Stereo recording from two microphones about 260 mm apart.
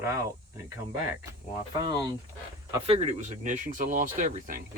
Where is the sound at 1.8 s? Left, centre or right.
Centre; by 4.6 s right.